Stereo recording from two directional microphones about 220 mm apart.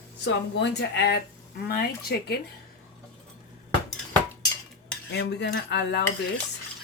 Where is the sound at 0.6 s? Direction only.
50° left (ahead or behind).